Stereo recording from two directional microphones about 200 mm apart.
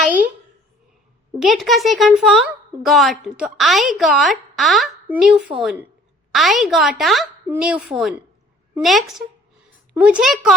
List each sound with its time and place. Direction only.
1.4 s speech: centre (ahead or behind)